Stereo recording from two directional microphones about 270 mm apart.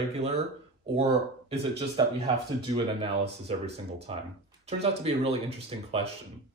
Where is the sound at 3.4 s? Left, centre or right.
Right.